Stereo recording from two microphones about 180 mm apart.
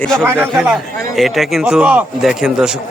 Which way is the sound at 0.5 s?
Centre (ahead or behind).